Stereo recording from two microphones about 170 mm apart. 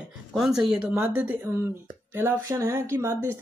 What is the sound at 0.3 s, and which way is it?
Speech, centre (ahead or behind).